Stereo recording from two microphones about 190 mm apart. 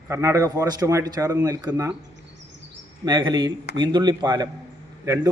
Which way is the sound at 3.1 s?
20° right (ahead or behind).